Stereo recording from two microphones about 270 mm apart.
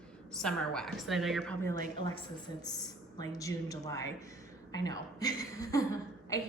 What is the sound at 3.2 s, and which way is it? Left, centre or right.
A woman's voice, centre.